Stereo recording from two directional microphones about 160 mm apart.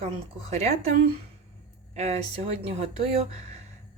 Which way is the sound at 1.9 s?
45° right (ahead or behind).